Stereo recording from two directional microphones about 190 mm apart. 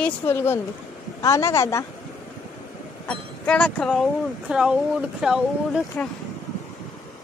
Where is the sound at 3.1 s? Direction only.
5° left (ahead or behind).